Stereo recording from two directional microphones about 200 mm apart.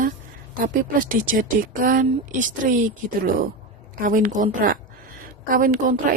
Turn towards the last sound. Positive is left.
turn(degrees=-45)  # may be behind; listen again after turning